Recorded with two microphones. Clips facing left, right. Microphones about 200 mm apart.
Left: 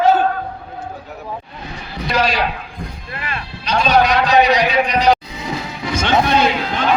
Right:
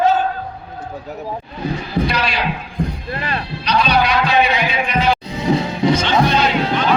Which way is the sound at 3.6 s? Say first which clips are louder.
Left 2 dB; 45° left (ahead or behind).